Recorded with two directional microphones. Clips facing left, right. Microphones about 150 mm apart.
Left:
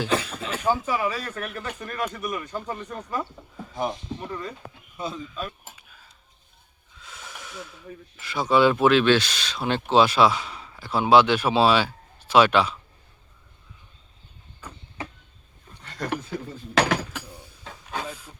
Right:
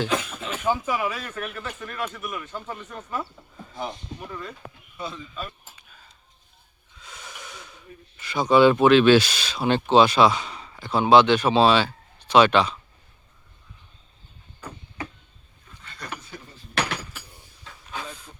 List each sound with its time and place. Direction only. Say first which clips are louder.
0.1 s speech: left 1 dB; 35° left (ahead or behind)
0.3 s speech: left 1 dB; centre (ahead or behind)
4.3 s speech: left 2 dB; centre (ahead or behind)
7.0 s snort: even; centre (ahead or behind)
8.2 s speech: right 3 dB; centre (ahead or behind)
15.8 s a sound: left 8 dB; 85° left